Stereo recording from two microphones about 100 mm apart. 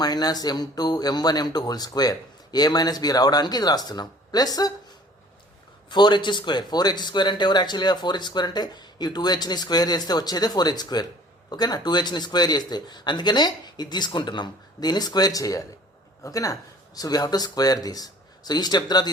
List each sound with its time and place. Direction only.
0.0 s speech: 40° left (ahead or behind)
5.9 s speech: 50° left (ahead or behind)